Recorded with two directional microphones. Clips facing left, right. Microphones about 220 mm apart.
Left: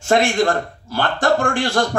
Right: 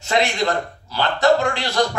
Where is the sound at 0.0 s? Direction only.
50° left (ahead or behind).